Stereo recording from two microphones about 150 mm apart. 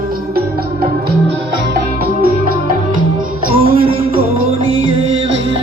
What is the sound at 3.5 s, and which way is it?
Music, 40° right (ahead or behind).